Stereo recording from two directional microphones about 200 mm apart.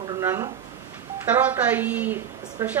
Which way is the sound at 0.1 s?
15° right (ahead or behind).